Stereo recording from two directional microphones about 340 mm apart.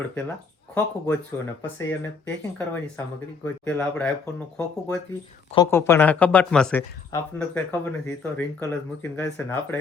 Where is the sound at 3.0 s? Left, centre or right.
Centre.